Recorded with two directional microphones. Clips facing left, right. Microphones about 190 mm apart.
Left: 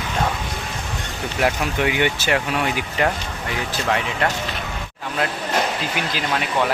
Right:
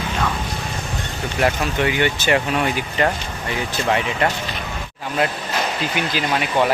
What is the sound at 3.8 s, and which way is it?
Speech, 5° right (ahead or behind).